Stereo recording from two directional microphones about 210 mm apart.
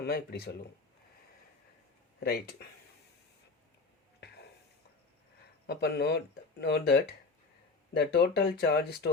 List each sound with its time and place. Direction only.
0.0 s speech: 50° left (ahead or behind)
2.2 s speech: 50° left (ahead or behind)
4.2 s a sound: 55° left (ahead or behind)
5.6 s speech: 50° left (ahead or behind)